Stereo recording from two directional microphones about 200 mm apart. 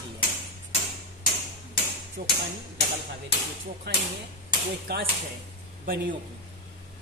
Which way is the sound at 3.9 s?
55° right (ahead or behind).